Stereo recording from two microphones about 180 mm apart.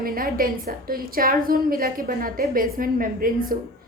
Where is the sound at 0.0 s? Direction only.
55° right (ahead or behind).